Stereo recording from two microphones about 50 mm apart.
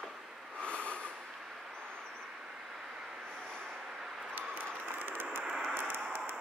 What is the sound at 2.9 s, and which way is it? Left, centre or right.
Vehicle, centre.